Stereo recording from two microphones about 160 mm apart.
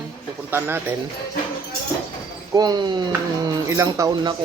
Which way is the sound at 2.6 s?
25° right (ahead or behind).